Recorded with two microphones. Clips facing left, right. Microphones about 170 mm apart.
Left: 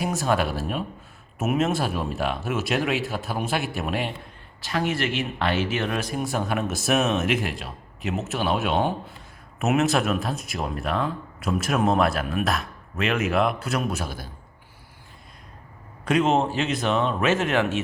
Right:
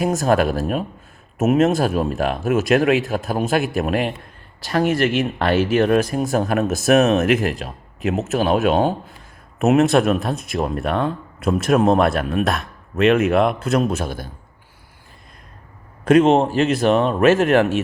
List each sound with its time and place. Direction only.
0.0 s speech: 45° right (ahead or behind)
16.3 s speech: 50° right (ahead or behind)